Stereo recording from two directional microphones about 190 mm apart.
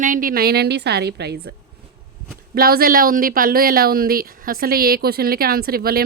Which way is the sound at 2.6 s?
50° right (ahead or behind).